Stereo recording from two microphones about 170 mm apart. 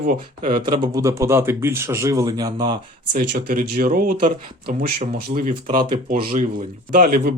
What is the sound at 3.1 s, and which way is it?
Speech, 65° right (ahead or behind).